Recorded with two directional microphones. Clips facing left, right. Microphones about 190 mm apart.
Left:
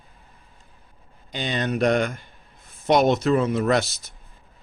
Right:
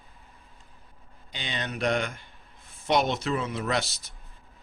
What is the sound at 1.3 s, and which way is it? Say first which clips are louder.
Speech: left 9 dB; 45° left (ahead or behind).